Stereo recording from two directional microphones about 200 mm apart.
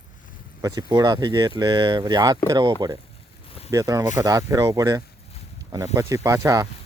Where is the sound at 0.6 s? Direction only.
20° right (ahead or behind).